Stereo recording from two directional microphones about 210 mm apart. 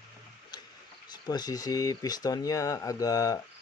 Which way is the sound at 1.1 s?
20° left (ahead or behind).